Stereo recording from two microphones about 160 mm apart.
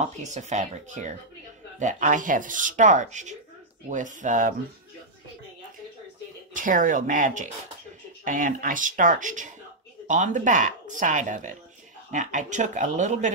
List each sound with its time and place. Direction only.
0.0 s speech: 45° right (ahead or behind)
6.5 s speech: 55° right (ahead or behind)